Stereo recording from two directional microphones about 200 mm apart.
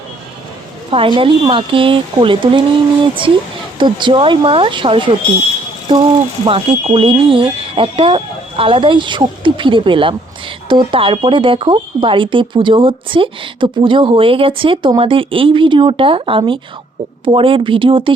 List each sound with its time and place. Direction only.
0.9 s speech: 25° right (ahead or behind)